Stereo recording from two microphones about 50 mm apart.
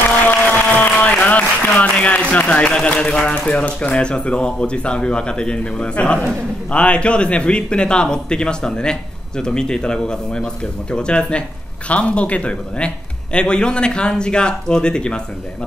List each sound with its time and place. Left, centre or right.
0.1 s applause: left
3.3 s speech: left